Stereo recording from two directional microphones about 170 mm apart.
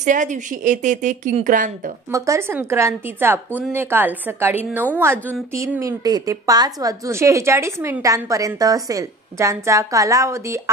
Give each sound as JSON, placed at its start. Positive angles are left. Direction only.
{"t": 0.0, "sound": "a woman's voice", "side_deg": -45}
{"t": 2.1, "sound": "a woman's voice", "side_deg": -15}